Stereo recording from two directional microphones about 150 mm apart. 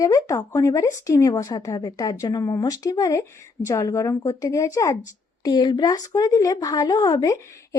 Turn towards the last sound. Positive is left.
turn(degrees=20)  # may be behind; listen again after turning